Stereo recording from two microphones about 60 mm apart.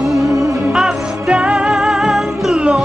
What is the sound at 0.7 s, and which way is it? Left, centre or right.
Music, centre.